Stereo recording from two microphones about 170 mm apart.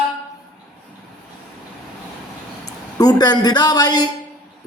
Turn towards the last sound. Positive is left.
turn(degrees=25)  # may be behind; listen again after turning